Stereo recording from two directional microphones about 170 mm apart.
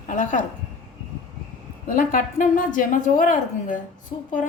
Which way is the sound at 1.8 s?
55° left (ahead or behind).